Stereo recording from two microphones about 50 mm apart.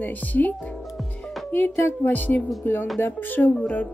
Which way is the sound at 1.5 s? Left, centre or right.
Left.